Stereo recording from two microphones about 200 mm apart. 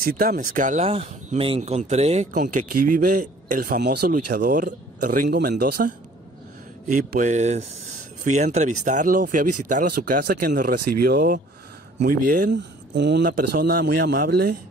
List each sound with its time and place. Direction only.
0.0 s speech: 45° right (ahead or behind)
12.5 s speech: 60° right (ahead or behind)
13.2 s speech: 45° right (ahead or behind)